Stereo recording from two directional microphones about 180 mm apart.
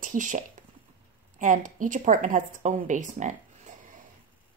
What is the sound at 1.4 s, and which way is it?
Speech, 45° right (ahead or behind).